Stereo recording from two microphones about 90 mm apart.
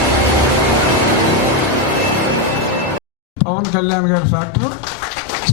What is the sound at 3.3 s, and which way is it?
Speech, 15° left (ahead or behind).